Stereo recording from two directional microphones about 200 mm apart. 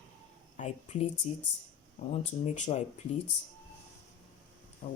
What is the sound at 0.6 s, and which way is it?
Speech, 35° left (ahead or behind).